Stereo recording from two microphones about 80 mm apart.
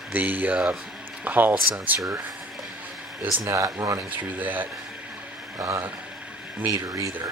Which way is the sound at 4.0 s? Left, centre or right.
Centre.